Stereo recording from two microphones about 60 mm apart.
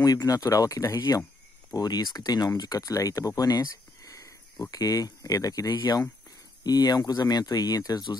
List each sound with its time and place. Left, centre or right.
0.0 s speech: left
1.7 s speech: left
4.6 s speech: left